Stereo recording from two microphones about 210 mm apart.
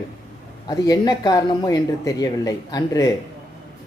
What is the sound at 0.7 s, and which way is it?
Speech, 20° left (ahead or behind).